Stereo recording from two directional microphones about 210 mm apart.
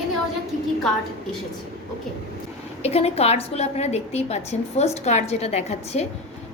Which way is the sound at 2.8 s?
30° left (ahead or behind).